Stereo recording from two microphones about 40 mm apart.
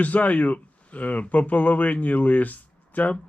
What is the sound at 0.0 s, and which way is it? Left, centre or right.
Speech, left.